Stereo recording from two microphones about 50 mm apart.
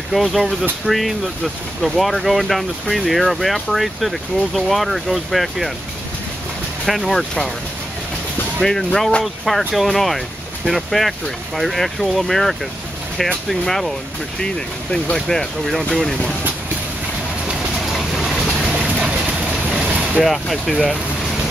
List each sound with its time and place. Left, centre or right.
0.1 s speech: centre
7.1 s speech: centre
8.5 s speech: centre
15.1 s speech: centre
17.7 s vehicle: centre
18.9 s vehicle: right
20.2 s speech: centre